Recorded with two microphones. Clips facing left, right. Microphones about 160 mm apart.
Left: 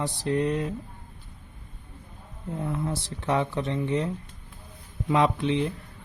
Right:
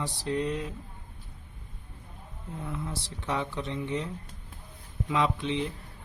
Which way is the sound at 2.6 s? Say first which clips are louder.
Left 6 dB; 50° left (ahead or behind).